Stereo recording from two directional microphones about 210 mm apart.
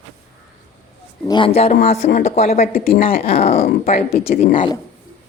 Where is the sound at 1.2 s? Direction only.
20° left (ahead or behind).